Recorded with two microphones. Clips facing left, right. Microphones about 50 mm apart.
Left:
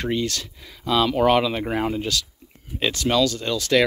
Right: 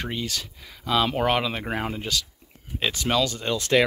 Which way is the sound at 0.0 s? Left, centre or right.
Centre.